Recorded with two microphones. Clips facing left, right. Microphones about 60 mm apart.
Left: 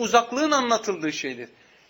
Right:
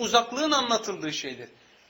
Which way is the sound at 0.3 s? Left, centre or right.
Left.